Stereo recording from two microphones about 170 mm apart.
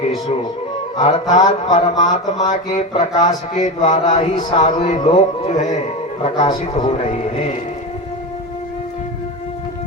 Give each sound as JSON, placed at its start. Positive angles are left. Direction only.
{"t": 0.9, "sound": "mantra", "side_deg": 40}
{"t": 6.2, "sound": "mantra", "side_deg": 35}